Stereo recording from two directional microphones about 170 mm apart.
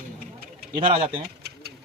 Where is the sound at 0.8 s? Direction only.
35° right (ahead or behind).